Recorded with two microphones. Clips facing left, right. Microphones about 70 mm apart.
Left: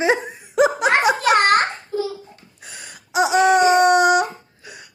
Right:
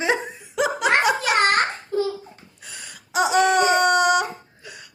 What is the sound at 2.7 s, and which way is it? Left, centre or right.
Gasp, left.